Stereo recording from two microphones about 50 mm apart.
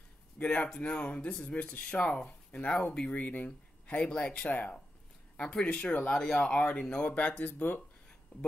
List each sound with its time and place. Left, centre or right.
0.4 s speech: left
5.4 s speech: left
6.0 s speech: centre
6.5 s speech: centre